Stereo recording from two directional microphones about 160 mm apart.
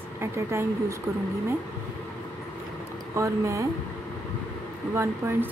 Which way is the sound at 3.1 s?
20° right (ahead or behind).